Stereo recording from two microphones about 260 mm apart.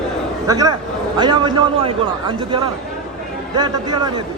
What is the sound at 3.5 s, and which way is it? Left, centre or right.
Speech, centre.